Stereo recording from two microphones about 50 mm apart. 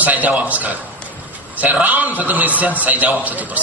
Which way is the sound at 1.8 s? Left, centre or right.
Right.